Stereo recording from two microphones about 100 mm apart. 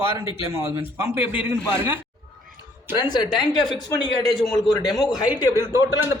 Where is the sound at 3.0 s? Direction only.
45° left (ahead or behind).